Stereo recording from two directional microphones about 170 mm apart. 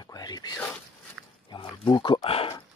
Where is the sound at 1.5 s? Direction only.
30° left (ahead or behind).